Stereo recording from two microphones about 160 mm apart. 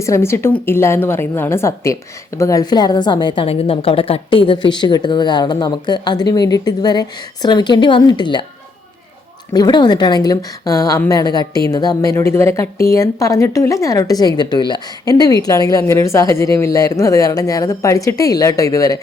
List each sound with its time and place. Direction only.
0.0 s a woman's voice: 15° left (ahead or behind)
9.5 s a woman's voice: 25° left (ahead or behind)